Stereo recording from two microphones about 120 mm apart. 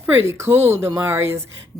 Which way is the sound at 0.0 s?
20° right (ahead or behind).